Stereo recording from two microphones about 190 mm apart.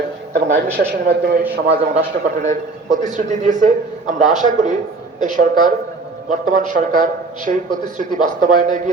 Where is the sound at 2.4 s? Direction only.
40° right (ahead or behind).